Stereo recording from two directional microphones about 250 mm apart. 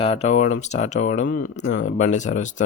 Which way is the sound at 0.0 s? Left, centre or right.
Left.